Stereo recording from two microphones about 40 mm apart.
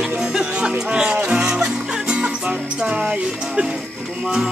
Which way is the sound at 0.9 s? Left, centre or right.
Right.